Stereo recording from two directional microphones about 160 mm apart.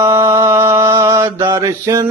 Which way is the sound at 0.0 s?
15° right (ahead or behind).